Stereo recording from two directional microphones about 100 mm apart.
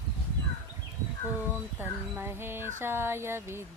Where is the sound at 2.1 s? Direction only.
25° right (ahead or behind).